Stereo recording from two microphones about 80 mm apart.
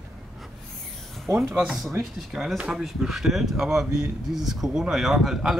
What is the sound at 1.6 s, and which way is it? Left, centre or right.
Speech, centre.